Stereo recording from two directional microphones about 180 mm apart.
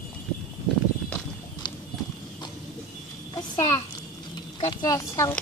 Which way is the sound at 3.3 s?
20° left (ahead or behind).